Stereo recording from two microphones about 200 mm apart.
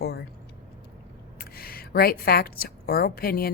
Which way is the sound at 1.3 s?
50° left (ahead or behind).